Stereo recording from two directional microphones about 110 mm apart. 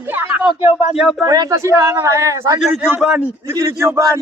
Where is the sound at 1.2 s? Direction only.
35° right (ahead or behind).